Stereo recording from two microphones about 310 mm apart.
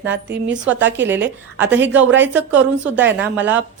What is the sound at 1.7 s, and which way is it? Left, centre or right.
Speech, right.